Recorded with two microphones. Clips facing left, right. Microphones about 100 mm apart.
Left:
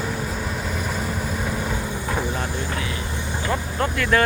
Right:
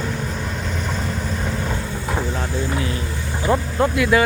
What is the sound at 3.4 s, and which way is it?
Vehicle, 15° right (ahead or behind).